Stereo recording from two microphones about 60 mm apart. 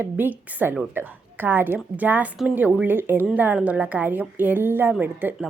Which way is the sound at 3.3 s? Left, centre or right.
Right.